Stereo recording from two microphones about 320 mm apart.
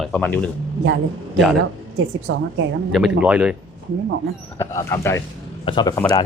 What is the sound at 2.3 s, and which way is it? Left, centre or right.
Speech, right.